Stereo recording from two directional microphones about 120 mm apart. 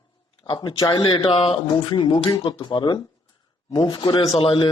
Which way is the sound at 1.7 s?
35° left (ahead or behind).